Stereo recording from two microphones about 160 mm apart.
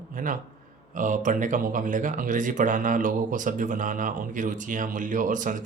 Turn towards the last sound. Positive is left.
turn(degrees=-55)  # may be behind; listen again after turning